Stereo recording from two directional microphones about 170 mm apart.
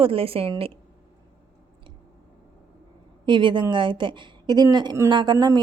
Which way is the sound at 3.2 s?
30° right (ahead or behind).